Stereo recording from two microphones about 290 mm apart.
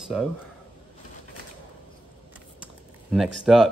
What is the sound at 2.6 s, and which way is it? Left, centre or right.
Typing, centre.